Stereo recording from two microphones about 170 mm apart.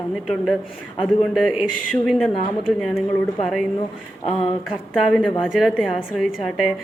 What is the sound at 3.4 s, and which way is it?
A woman's voice, centre (ahead or behind).